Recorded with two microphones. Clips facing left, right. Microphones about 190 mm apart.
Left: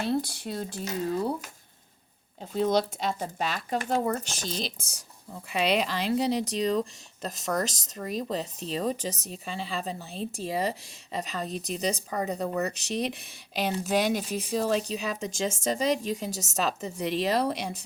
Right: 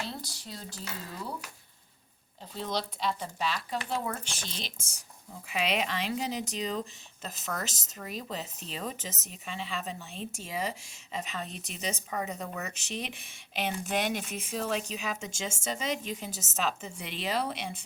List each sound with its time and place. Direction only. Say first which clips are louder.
0.0 s speech: left 11 dB; 55° left (ahead or behind)
2.4 s speech: left 9 dB; 50° left (ahead or behind)